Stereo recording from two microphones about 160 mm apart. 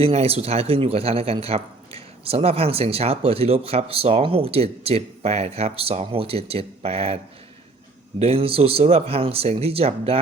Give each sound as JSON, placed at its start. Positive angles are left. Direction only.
{"t": 0.0, "sound": "a man's voice", "side_deg": -40}
{"t": 8.2, "sound": "a man's voice", "side_deg": -35}